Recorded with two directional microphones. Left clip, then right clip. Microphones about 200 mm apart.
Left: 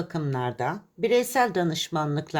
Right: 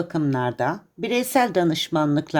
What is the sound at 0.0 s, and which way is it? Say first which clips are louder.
A woman's voice: right 6 dB; 25° right (ahead or behind).